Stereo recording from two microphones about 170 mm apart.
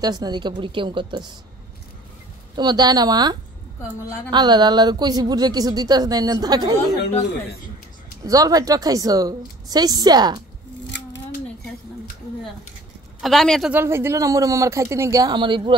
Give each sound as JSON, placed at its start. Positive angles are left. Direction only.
{"t": 0.0, "sound": "speech", "side_deg": -25}
{"t": 2.5, "sound": "speech", "side_deg": -25}
{"t": 8.2, "sound": "speech", "side_deg": -20}
{"t": 13.2, "sound": "speech", "side_deg": 0}
{"t": 13.7, "sound": "speech", "side_deg": -15}